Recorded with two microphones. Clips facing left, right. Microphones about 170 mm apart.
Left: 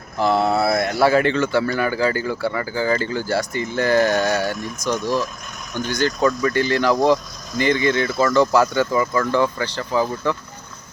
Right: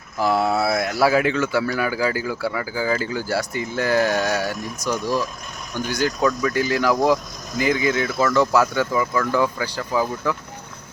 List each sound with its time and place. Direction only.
0.2 s speech: 5° right (ahead or behind)